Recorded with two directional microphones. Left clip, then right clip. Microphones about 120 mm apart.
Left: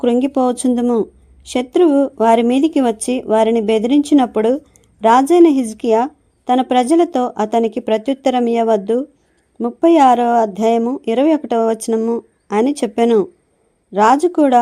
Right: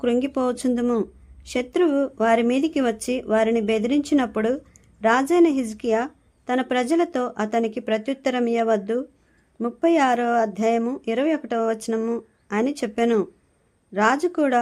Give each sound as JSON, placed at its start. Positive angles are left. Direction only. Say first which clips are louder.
{"t": 0.0, "sound": "speech", "louder": "left 7 dB", "side_deg": 35}
{"t": 12.5, "sound": "speech", "louder": "left 8 dB", "side_deg": 40}